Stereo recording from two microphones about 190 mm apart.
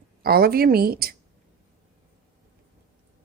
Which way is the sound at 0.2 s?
55° right (ahead or behind).